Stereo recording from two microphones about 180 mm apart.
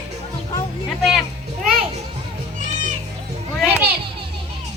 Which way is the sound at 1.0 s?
Centre (ahead or behind).